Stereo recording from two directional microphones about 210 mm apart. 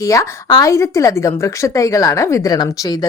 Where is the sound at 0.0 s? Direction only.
15° left (ahead or behind).